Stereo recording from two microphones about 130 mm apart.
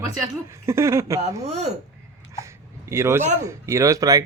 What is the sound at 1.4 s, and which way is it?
Speech, 55° right (ahead or behind).